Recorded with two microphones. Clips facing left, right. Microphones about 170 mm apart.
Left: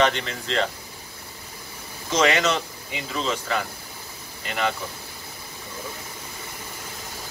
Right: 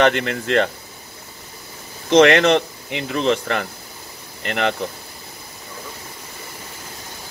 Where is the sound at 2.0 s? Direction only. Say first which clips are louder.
Right 9 dB; 65° right (ahead or behind).